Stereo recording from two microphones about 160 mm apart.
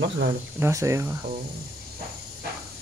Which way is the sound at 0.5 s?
15° right (ahead or behind).